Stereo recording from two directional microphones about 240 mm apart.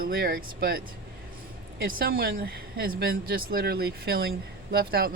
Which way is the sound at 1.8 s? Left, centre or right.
Right.